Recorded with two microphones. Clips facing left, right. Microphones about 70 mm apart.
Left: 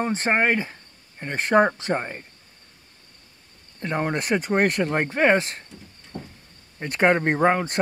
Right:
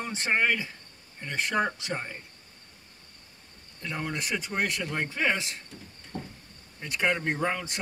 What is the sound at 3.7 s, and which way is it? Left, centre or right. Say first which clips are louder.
Speech: left 8 dB; left.